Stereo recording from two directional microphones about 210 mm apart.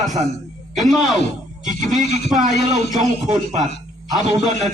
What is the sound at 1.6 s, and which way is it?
Speech, 35° right (ahead or behind).